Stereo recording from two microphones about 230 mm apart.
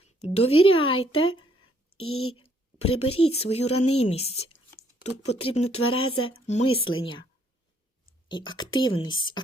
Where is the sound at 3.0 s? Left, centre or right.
Left.